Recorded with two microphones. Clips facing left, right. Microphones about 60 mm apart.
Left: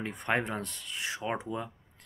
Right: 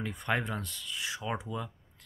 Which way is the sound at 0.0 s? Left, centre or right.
Left.